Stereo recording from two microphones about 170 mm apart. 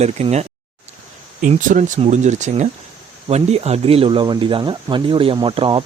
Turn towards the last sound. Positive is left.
turn(degrees=-30)  # may be behind; listen again after turning